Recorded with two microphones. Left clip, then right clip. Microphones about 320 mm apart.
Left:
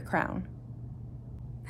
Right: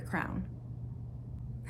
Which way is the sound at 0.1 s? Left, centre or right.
Left.